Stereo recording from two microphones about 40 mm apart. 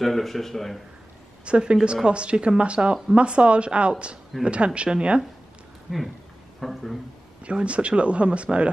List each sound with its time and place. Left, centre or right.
0.0 s speech: centre
1.4 s a woman's voice: right
6.6 s speech: centre
7.4 s speech: right